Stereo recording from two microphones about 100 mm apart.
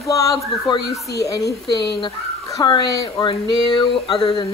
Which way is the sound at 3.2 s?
50° left (ahead or behind).